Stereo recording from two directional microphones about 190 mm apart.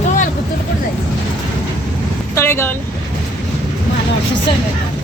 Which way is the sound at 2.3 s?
15° left (ahead or behind).